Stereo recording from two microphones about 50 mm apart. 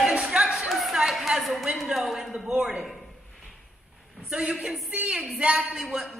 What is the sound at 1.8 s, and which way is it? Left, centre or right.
Speech, centre.